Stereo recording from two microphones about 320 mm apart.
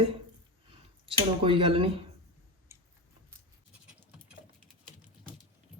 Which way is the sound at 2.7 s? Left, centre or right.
Centre.